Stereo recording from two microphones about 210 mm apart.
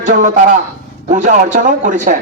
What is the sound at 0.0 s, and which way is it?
A man's voice, 35° right (ahead or behind).